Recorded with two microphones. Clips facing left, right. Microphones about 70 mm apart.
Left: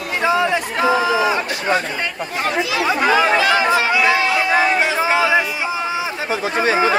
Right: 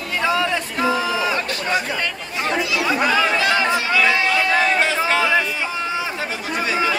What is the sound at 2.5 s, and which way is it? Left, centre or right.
Chatter, left.